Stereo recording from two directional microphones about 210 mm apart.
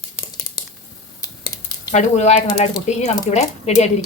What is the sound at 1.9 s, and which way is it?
Speech, 35° left (ahead or behind).